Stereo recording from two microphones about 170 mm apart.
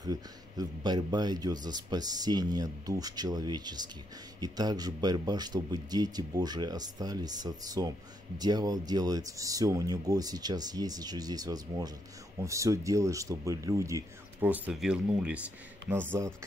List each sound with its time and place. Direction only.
0.0 s speech: 20° right (ahead or behind)